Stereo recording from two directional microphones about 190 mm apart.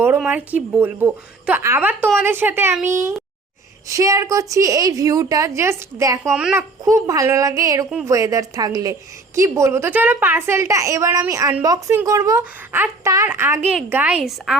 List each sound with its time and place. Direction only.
0.3 s a woman's voice: 10° right (ahead or behind)